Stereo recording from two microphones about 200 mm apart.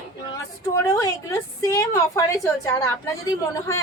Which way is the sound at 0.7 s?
15° left (ahead or behind).